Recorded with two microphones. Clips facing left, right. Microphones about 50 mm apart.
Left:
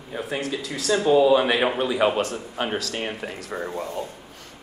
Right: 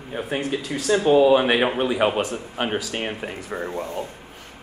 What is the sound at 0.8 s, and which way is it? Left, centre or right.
Speech, centre.